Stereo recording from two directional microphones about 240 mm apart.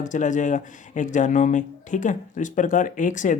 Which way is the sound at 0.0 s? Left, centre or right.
Left.